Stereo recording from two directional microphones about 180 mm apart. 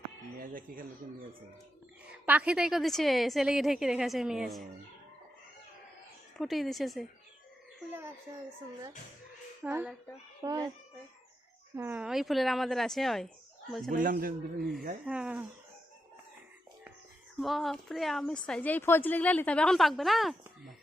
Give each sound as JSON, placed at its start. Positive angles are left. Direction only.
{"t": 0.3, "sound": "speech", "side_deg": -50}
{"t": 2.0, "sound": "a woman's voice", "side_deg": -10}
{"t": 6.4, "sound": "a woman's voice", "side_deg": 0}
{"t": 7.9, "sound": "speech", "side_deg": -10}
{"t": 9.6, "sound": "speech", "side_deg": -10}
{"t": 11.8, "sound": "a woman's voice", "side_deg": -10}
{"t": 13.9, "sound": "a man's voice", "side_deg": -50}
{"t": 15.0, "sound": "speech", "side_deg": -5}
{"t": 17.4, "sound": "a woman's voice", "side_deg": 0}